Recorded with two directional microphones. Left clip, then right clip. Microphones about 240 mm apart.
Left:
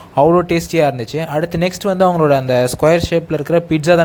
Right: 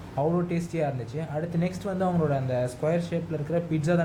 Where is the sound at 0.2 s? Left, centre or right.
Left.